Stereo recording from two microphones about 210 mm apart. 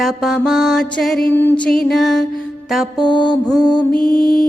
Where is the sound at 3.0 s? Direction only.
20° left (ahead or behind).